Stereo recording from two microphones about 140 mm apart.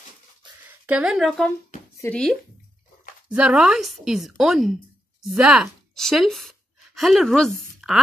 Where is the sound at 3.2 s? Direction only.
10° right (ahead or behind).